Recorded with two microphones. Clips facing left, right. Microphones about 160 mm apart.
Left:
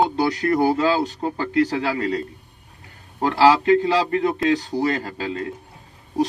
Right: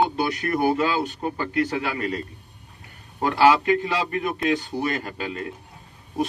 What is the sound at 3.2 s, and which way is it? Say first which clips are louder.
Speech: left 2 dB; 30° left (ahead or behind).